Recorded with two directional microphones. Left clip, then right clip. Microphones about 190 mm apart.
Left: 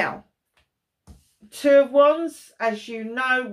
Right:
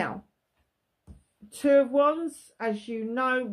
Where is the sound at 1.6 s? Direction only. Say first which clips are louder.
Left 6 dB; 50° right (ahead or behind).